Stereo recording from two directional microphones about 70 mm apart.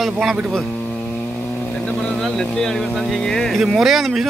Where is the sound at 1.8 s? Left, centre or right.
Centre.